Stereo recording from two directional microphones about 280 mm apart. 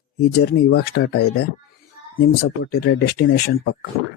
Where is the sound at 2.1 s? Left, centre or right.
Left.